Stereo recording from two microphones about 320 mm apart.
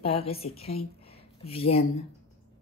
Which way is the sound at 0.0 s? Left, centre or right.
Centre.